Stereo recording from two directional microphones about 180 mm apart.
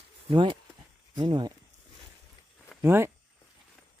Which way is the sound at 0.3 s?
25° right (ahead or behind).